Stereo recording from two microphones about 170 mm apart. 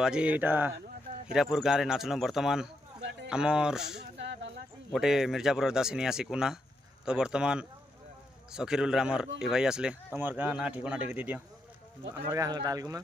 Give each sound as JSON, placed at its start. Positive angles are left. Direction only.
{"t": 0.0, "sound": "speech", "side_deg": -5}
{"t": 3.0, "sound": "a sound", "side_deg": -90}
{"t": 3.3, "sound": "speech", "side_deg": -5}
{"t": 4.2, "sound": "a sound", "side_deg": -90}
{"t": 4.9, "sound": "speech", "side_deg": 0}
{"t": 12.3, "sound": "speech", "side_deg": -20}